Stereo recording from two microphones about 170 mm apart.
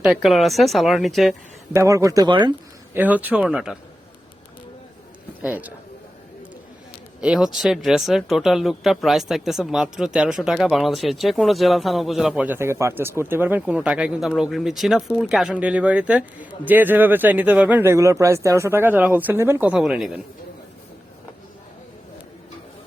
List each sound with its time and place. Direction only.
0.0 s speech: centre (ahead or behind)
1.7 s speech: 15° right (ahead or behind)
2.9 s speech: 10° right (ahead or behind)
5.4 s speech: 10° right (ahead or behind)
7.2 s speech: 5° right (ahead or behind)